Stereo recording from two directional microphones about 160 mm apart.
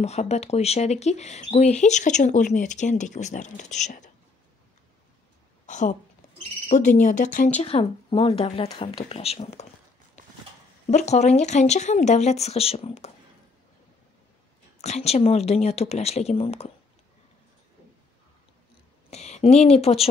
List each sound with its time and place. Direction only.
0.0 s speech: 40° left (ahead or behind)
5.7 s speech: 50° left (ahead or behind)
10.9 s speech: 45° left (ahead or behind)
14.8 s speech: 40° left (ahead or behind)
19.0 s a woman's voice: 40° left (ahead or behind)